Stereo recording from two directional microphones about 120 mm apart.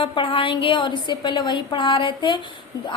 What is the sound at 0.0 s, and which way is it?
A woman's voice, 45° left (ahead or behind).